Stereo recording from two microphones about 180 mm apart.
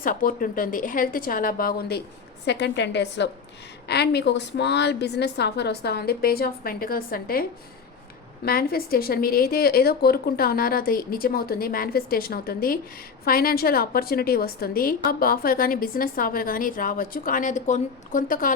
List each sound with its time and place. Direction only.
0.0 s a woman's voice: 50° left (ahead or behind)
2.5 s a woman's voice: 70° left (ahead or behind); by 7.4 s 55° left (ahead or behind)
8.4 s a woman's voice: 55° left (ahead or behind)